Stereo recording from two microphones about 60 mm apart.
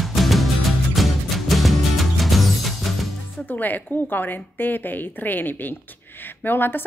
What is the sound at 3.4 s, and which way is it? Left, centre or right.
A woman's voice, left.